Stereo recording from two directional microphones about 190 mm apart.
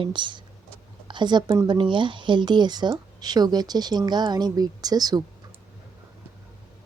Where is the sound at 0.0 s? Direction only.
25° right (ahead or behind).